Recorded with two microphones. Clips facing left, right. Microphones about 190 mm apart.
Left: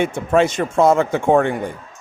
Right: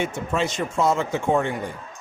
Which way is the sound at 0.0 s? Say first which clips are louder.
Left 8 dB; 55° left (ahead or behind).